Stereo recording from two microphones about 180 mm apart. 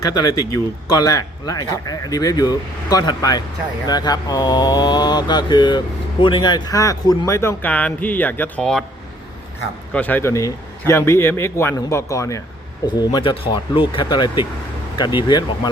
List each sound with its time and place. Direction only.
0.0 s mantra: 20° left (ahead or behind); by 8.8 s 5° left (ahead or behind)
9.9 s a man's voice: 10° left (ahead or behind)
12.9 s mantra: 25° left (ahead or behind)